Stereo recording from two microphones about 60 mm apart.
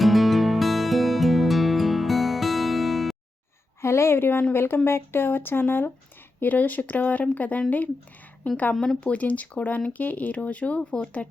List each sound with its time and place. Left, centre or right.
0.0 s music: centre
3.8 s a woman's voice: left
8.7 s speech: centre
9.0 s speech: left